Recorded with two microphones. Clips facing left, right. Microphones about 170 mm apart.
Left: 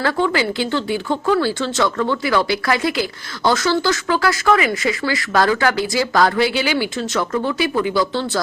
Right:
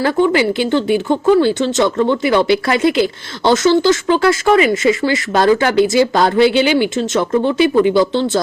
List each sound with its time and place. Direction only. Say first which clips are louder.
0.0 s speech: right 5 dB; 20° right (ahead or behind)